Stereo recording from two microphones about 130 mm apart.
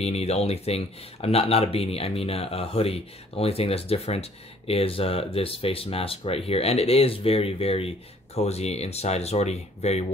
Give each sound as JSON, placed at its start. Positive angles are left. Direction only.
{"t": 0.0, "sound": "speech", "side_deg": 55}